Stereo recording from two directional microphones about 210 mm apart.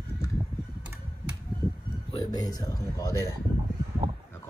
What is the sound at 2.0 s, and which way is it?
Speech, 20° left (ahead or behind).